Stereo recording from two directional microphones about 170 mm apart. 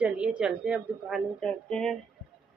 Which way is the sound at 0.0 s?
5° right (ahead or behind).